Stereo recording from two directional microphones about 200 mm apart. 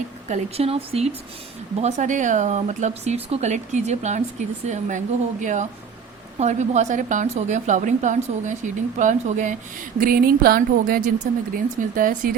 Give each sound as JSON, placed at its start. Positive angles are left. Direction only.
{"t": 0.3, "sound": "speech", "side_deg": -30}